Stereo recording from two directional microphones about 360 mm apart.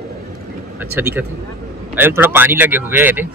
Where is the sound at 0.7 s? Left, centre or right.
Centre.